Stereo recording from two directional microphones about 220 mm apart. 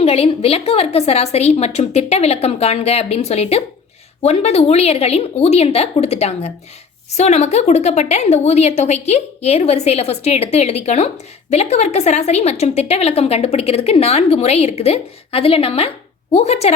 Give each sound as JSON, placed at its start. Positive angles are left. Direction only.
{"t": 0.0, "sound": "a woman's voice", "side_deg": 25}